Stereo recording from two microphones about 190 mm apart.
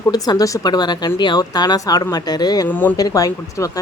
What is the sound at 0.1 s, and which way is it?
A woman's voice, 20° left (ahead or behind).